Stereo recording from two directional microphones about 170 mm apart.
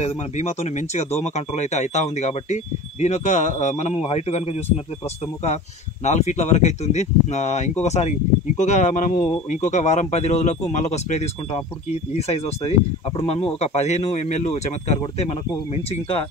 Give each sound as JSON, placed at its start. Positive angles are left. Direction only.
{"t": 0.0, "sound": "speech", "side_deg": 40}
{"t": 6.0, "sound": "speech", "side_deg": 40}